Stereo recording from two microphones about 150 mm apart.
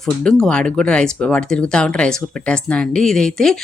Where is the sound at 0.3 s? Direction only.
5° left (ahead or behind).